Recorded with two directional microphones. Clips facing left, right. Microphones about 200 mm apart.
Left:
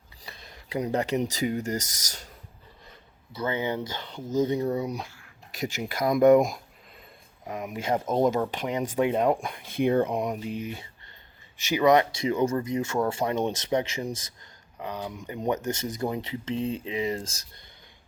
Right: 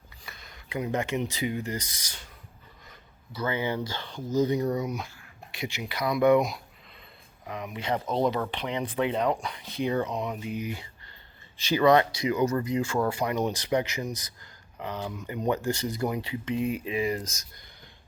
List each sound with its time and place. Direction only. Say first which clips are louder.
0.3 s speech: left 3 dB; 30° left (ahead or behind)
3.3 s speech: left 1 dB; 25° left (ahead or behind); by 10.5 s 45° left (ahead or behind)
10.5 s speech: even; 25° left (ahead or behind)
11.5 s speech: even; 15° left (ahead or behind)
14.8 s speech: even; 15° left (ahead or behind)